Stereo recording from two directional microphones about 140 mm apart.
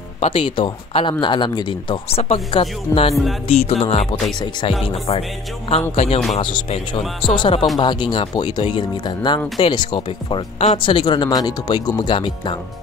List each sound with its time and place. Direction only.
0.2 s a man's voice: 40° left (ahead or behind)
4.4 s speech: 30° left (ahead or behind)
4.8 s a man's voice: 45° left (ahead or behind)